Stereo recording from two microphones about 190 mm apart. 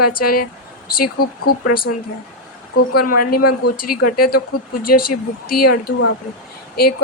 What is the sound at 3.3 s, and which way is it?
Speech, 50° left (ahead or behind).